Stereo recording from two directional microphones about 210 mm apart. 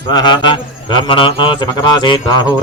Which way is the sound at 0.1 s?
20° left (ahead or behind).